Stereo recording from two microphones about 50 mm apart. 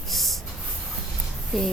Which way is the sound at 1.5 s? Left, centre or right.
Centre.